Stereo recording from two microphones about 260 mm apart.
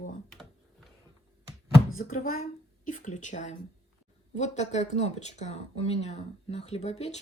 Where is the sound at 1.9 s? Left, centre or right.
Left.